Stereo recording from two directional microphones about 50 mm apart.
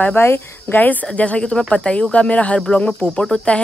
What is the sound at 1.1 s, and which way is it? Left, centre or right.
Speech, left.